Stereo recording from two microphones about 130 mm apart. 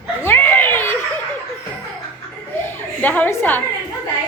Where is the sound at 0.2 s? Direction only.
15° left (ahead or behind).